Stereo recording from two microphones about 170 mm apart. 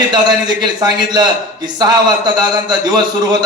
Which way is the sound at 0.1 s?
25° right (ahead or behind).